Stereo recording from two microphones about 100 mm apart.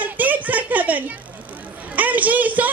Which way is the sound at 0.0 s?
15° right (ahead or behind).